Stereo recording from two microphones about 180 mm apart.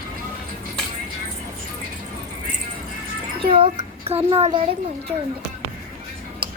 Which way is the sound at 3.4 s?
30° right (ahead or behind).